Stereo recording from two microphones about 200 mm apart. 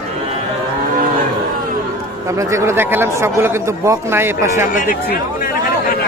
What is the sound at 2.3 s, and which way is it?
A man's voice, 15° right (ahead or behind).